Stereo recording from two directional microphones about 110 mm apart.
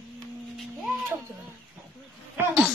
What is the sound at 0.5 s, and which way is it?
Speech, centre (ahead or behind).